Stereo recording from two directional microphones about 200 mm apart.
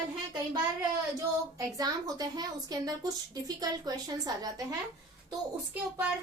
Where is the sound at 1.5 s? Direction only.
20° right (ahead or behind).